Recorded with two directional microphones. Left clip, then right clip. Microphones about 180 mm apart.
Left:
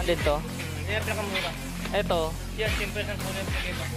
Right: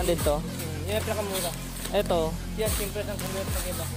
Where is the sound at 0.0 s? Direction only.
35° right (ahead or behind).